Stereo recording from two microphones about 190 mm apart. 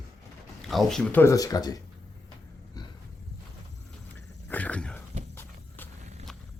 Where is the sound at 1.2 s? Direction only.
15° left (ahead or behind).